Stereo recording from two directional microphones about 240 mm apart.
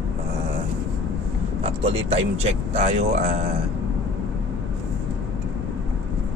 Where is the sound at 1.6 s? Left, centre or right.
Right.